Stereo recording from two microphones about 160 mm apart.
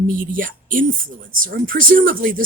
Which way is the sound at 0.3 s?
60° right (ahead or behind).